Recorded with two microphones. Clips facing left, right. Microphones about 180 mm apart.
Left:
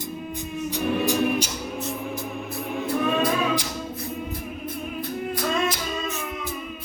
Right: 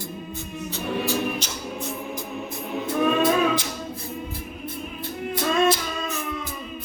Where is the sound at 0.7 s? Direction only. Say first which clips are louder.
Left 3 dB; 15° left (ahead or behind).